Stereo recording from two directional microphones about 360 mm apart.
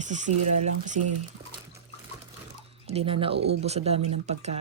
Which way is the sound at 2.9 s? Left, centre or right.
Centre.